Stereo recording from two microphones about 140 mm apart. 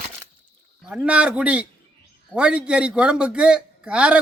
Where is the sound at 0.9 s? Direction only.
5° right (ahead or behind).